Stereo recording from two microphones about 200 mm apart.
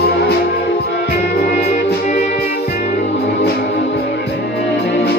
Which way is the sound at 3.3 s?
50° left (ahead or behind).